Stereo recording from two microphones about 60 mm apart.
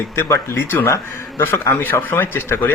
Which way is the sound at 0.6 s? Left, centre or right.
Left.